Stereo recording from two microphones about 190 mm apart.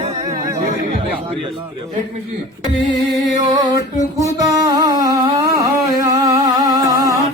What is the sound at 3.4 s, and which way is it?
Music, 20° right (ahead or behind).